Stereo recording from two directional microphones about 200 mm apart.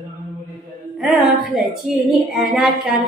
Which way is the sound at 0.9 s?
Centre (ahead or behind).